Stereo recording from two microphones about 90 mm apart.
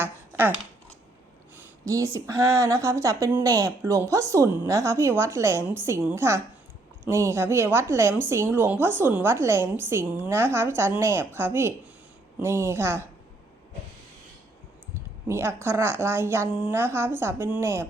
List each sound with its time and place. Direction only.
0.0 s a sound: 25° right (ahead or behind)
1.8 s a woman's voice: 35° right (ahead or behind)
15.3 s a woman's voice: 30° right (ahead or behind)